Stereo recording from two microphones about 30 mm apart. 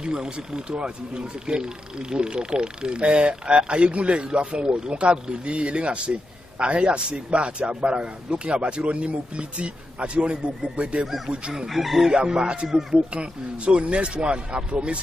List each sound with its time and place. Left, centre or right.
0.0 s speech: right
11.5 s speech: centre
12.1 s speech: right